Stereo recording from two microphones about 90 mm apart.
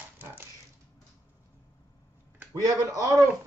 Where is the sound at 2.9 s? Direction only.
40° right (ahead or behind).